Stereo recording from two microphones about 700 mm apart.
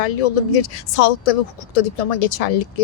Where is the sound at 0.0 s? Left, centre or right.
Left.